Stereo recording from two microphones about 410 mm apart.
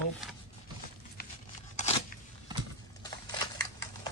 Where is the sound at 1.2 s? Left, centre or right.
Left.